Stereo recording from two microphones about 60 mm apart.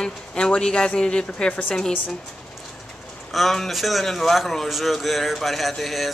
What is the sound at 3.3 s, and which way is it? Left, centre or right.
A man's voice, centre.